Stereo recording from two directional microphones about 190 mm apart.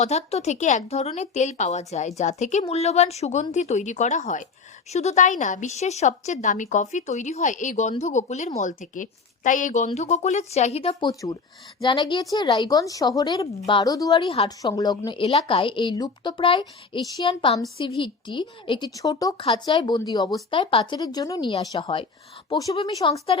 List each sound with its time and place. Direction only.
0.0 s a woman's voice: 35° left (ahead or behind)